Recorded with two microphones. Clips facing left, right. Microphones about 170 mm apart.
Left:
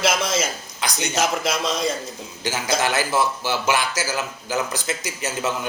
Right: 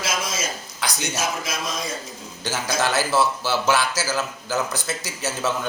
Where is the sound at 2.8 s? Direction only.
15° left (ahead or behind).